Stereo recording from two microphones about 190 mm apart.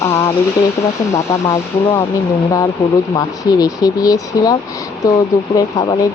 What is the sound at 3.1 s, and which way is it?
Speech, 20° left (ahead or behind).